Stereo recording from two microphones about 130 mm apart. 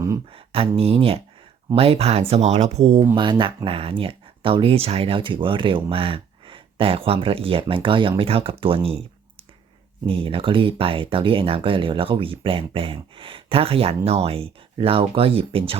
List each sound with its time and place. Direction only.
0.3 s speech: 45° right (ahead or behind)
3.2 s speech: 40° right (ahead or behind)
10.1 s speech: 40° right (ahead or behind)